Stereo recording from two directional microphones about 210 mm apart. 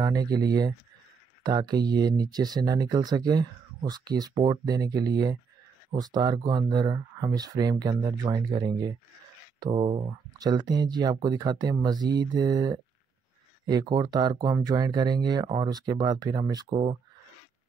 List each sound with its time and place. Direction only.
0.0 s speech: 15° right (ahead or behind)